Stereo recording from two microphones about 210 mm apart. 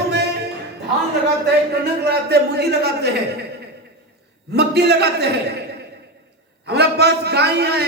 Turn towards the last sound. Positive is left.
turn(degrees=-50)  # may be behind; listen again after turning